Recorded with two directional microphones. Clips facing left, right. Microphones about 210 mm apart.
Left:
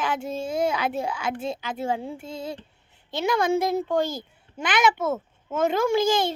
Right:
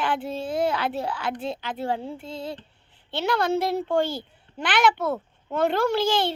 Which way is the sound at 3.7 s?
45° left (ahead or behind).